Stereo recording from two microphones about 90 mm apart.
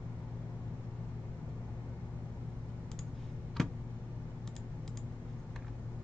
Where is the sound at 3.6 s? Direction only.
5° left (ahead or behind).